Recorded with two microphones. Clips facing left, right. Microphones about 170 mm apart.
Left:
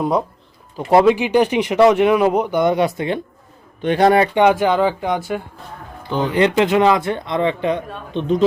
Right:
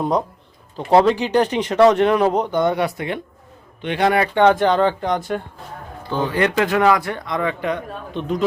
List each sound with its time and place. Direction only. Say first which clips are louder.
0.0 s speech: left 1 dB; 5° left (ahead or behind); by 3.2 s 25° left (ahead or behind)
3.8 s speech: left 4 dB; 40° left (ahead or behind)
4.4 s speech: even; 10° left (ahead or behind)
6.1 s a man's voice: left 3 dB; 20° left (ahead or behind)